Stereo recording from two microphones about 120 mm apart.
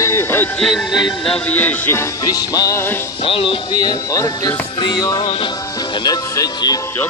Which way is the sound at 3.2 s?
45° left (ahead or behind).